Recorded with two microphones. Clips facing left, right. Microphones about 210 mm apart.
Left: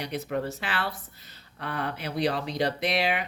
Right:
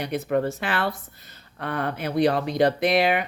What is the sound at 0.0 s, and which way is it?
Speech, 55° right (ahead or behind).